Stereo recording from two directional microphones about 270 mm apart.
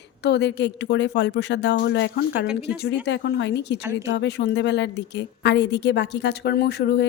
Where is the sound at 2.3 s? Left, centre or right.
Centre.